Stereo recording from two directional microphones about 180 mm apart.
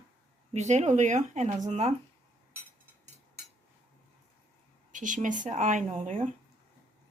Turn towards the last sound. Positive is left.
turn(degrees=-45)  # may be behind; listen again after turning